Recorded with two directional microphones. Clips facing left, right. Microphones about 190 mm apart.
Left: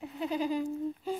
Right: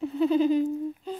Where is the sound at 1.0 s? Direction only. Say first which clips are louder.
Left 1 dB; 5° left (ahead or behind).